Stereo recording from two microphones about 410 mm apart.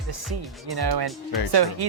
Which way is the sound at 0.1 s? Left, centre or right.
Right.